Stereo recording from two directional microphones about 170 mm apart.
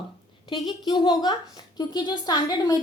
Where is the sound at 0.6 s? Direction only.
25° left (ahead or behind).